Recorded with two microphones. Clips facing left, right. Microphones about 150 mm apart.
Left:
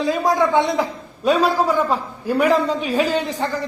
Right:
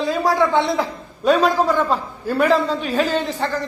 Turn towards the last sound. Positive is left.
turn(degrees=15)  # may be behind; listen again after turning